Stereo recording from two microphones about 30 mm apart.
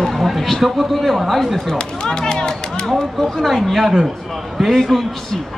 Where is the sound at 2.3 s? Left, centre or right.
Left.